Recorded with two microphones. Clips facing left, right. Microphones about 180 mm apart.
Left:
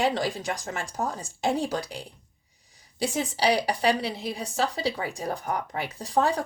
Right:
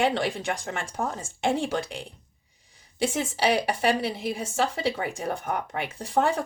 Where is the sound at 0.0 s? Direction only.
25° right (ahead or behind).